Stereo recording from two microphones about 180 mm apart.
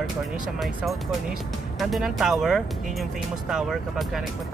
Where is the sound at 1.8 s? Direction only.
Centre (ahead or behind).